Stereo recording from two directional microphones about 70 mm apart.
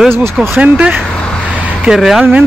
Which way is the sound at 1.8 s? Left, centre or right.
Centre.